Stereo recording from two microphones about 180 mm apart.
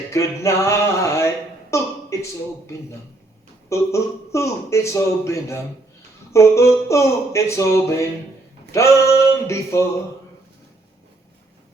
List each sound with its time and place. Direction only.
0.1 s speech: 15° left (ahead or behind)
1.7 s a sound: 15° left (ahead or behind)
3.7 s a man's voice: 15° left (ahead or behind)